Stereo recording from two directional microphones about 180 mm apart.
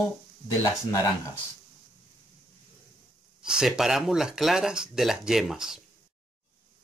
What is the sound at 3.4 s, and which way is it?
Speech, 5° right (ahead or behind).